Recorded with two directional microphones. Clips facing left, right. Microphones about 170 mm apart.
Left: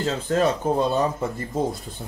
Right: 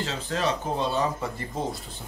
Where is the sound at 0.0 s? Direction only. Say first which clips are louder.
Left 6 dB; 50° left (ahead or behind).